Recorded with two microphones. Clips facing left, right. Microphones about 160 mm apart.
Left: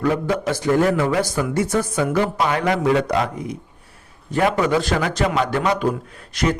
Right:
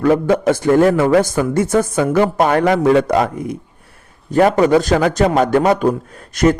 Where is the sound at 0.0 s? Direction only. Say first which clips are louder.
Right 7 dB; 50° right (ahead or behind).